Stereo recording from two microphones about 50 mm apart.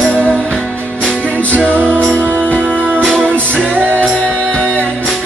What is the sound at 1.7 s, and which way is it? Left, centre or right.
Music, right.